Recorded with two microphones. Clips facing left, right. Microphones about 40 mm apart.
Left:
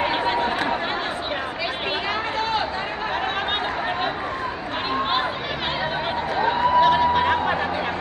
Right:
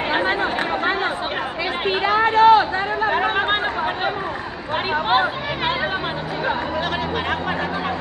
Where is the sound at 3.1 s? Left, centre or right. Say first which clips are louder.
Right 4 dB; right.